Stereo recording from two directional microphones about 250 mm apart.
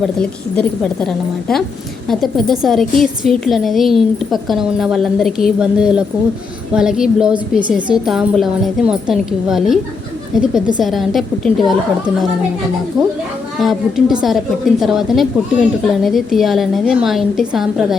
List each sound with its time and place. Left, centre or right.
0.0 s a woman's voice: centre
13.6 s a woman's voice: centre